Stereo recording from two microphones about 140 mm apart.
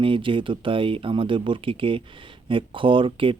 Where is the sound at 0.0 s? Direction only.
35° right (ahead or behind).